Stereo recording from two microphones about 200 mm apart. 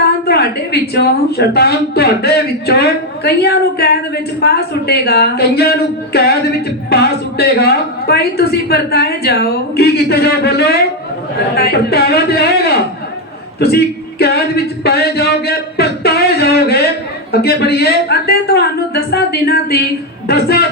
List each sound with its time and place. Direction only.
0.3 s a woman's voice: 55° left (ahead or behind)
6.1 s music: 55° left (ahead or behind)
6.9 s a woman's voice: 55° left (ahead or behind)
13.6 s singing: 55° left (ahead or behind)
17.4 s a woman's voice: 55° left (ahead or behind)